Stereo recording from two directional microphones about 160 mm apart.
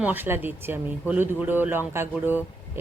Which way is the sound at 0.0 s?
10° right (ahead or behind).